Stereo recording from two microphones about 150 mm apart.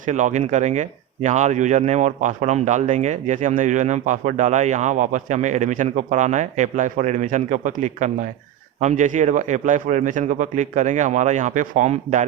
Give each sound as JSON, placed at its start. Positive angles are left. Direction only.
{"t": 0.0, "sound": "speech", "side_deg": -55}